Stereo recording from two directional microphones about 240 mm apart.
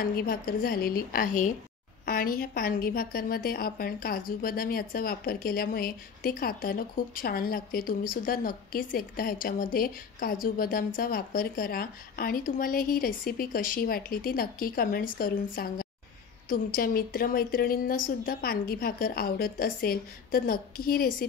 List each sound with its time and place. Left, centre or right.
0.0 s a woman's voice: left